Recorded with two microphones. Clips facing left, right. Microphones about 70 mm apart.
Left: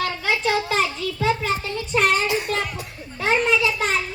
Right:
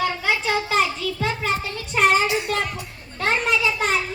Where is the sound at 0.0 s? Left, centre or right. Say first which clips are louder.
Even; centre.